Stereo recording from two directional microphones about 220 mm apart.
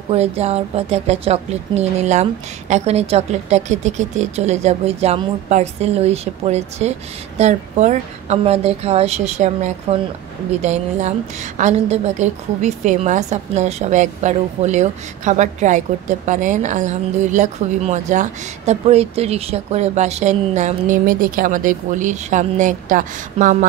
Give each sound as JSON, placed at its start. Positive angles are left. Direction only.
{"t": 0.1, "sound": "a woman's voice", "side_deg": -30}